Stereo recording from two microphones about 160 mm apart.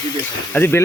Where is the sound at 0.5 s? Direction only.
15° left (ahead or behind).